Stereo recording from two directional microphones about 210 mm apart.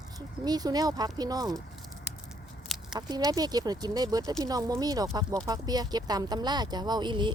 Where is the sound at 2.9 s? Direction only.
20° right (ahead or behind).